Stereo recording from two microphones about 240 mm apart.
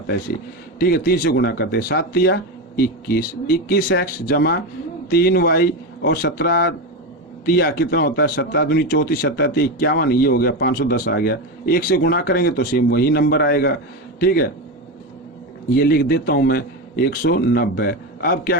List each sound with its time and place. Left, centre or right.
0.8 s speech: left
15.7 s speech: left